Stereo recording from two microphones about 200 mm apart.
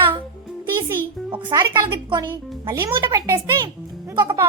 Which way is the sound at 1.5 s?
25° right (ahead or behind).